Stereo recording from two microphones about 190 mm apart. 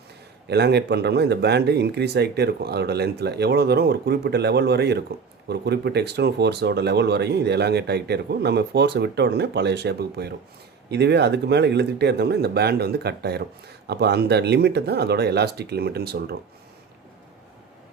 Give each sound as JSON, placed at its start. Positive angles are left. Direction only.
{"t": 0.4, "sound": "speech", "side_deg": -60}